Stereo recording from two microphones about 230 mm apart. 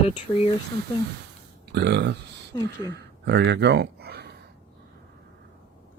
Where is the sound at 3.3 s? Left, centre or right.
Right.